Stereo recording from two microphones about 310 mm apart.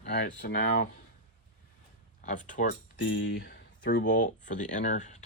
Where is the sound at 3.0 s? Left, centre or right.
Left.